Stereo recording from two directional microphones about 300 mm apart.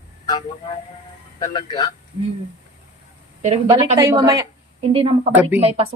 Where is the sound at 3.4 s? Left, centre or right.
Centre.